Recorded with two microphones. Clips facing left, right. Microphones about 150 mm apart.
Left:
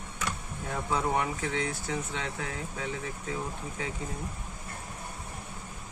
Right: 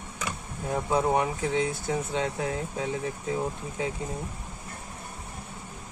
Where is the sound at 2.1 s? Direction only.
40° right (ahead or behind).